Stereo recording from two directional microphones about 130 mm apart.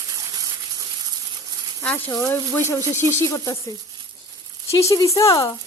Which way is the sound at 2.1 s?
30° left (ahead or behind).